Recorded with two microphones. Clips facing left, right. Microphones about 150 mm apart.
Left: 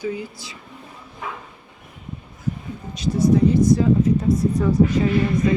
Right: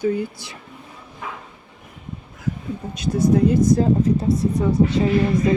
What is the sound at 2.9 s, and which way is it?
Speech, 55° right (ahead or behind).